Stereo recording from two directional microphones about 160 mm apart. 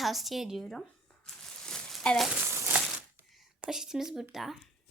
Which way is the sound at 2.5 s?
10° right (ahead or behind).